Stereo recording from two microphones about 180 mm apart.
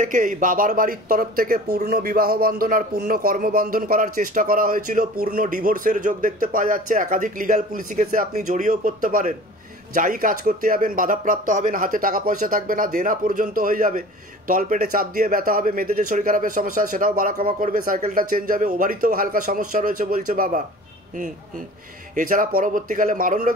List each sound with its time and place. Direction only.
0.0 s speech: 45° right (ahead or behind)
22.1 s speech: 50° right (ahead or behind)